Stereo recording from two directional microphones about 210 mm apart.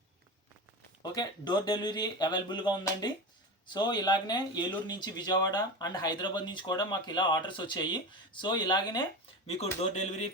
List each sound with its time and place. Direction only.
1.0 s speech: 20° left (ahead or behind)
9.9 s speech: 30° left (ahead or behind)